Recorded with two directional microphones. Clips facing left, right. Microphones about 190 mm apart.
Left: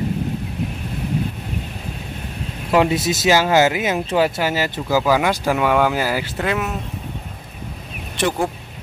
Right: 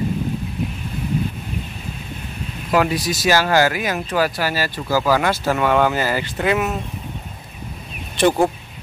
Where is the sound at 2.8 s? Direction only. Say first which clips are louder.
Left 2 dB; 25° left (ahead or behind); by 6.3 s 10° left (ahead or behind).